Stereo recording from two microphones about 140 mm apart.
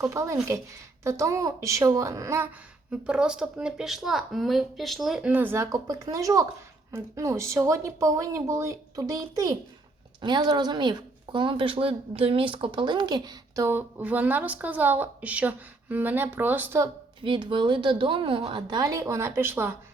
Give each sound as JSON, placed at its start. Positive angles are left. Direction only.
{"t": 0.1, "sound": "speech", "side_deg": -20}
{"t": 2.9, "sound": "speech", "side_deg": -5}
{"t": 5.7, "sound": "a woman's voice", "side_deg": -25}
{"t": 13.7, "sound": "speech", "side_deg": -15}
{"t": 17.2, "sound": "a woman's voice", "side_deg": -35}